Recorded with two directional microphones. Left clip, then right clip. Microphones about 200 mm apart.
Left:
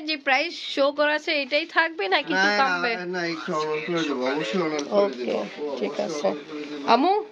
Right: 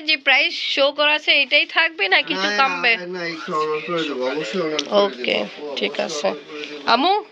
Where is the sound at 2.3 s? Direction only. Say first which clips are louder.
Even; 35° left (ahead or behind).